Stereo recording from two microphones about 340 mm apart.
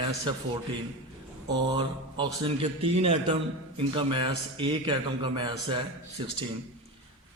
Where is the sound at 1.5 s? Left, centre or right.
Centre.